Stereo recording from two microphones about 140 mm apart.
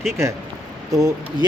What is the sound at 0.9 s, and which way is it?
Speech, 25° right (ahead or behind).